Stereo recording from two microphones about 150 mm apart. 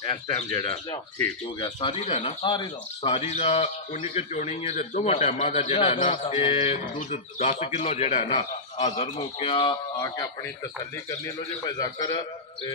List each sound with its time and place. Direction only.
0.5 s a man's voice: 25° left (ahead or behind)
11.2 s a man's voice: 25° left (ahead or behind)